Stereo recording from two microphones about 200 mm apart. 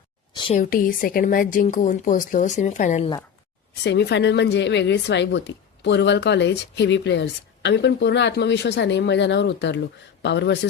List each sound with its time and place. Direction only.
0.3 s a sound: 25° left (ahead or behind)
0.6 s a woman's voice: 45° left (ahead or behind)
3.8 s a woman's voice: 60° left (ahead or behind)